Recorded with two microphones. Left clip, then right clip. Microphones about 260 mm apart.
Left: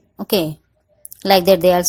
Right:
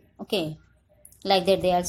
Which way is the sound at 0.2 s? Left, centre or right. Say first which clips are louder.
Left 9 dB; left.